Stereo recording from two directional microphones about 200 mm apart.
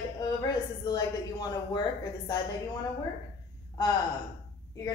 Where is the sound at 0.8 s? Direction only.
20° left (ahead or behind).